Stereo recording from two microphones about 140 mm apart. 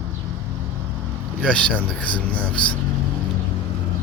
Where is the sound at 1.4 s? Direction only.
5° left (ahead or behind).